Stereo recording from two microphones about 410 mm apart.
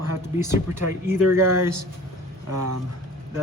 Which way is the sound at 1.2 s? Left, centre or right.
Right.